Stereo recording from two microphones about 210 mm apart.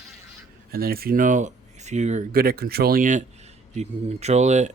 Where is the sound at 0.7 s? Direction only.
45° right (ahead or behind).